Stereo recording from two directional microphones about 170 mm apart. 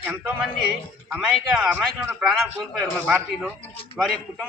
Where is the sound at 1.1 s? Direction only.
5° right (ahead or behind).